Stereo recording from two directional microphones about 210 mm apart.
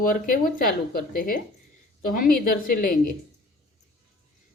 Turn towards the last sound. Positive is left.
turn(degrees=45)  # may be behind; listen again after turning